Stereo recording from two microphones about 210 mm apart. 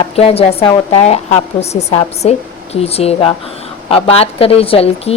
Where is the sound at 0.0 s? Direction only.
30° left (ahead or behind).